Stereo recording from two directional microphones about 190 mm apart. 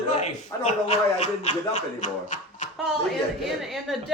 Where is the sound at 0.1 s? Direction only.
35° left (ahead or behind).